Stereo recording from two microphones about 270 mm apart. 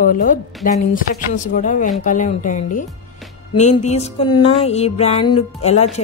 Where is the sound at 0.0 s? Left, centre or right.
Left.